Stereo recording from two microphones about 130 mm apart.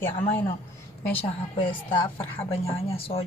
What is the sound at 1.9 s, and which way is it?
Speech, 40° left (ahead or behind).